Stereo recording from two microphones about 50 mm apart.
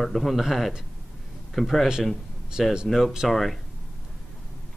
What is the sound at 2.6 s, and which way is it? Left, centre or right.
Speech, centre.